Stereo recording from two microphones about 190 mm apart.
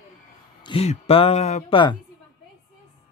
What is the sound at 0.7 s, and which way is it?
Speech, 30° left (ahead or behind).